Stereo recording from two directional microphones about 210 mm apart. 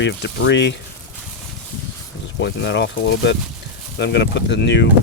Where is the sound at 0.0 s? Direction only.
55° left (ahead or behind).